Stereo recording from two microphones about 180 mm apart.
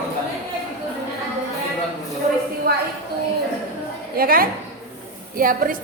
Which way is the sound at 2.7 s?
60° right (ahead or behind).